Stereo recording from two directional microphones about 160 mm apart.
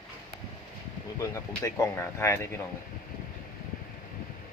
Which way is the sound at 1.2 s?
20° left (ahead or behind).